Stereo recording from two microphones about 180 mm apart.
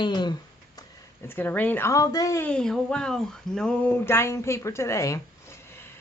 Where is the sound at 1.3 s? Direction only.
10° left (ahead or behind).